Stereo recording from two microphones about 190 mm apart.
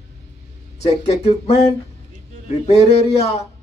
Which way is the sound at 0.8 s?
35° left (ahead or behind).